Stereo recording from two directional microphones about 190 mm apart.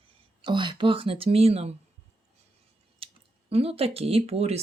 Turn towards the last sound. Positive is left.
turn(degrees=-30)  # may be behind; listen again after turning